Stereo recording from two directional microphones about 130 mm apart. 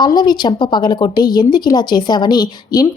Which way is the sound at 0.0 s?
35° left (ahead or behind).